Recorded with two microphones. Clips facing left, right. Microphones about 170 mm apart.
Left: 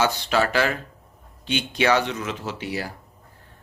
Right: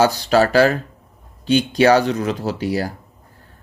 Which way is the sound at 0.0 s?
40° right (ahead or behind).